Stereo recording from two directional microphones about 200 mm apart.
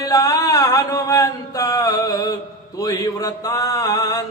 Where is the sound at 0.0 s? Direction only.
15° left (ahead or behind).